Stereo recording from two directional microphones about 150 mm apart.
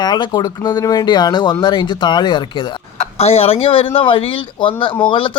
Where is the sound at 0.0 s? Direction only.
30° left (ahead or behind).